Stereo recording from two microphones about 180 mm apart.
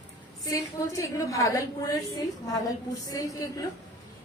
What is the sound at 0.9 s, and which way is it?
A woman's voice, 20° left (ahead or behind).